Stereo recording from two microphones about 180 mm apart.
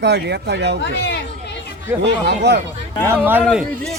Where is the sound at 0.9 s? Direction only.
75° left (ahead or behind).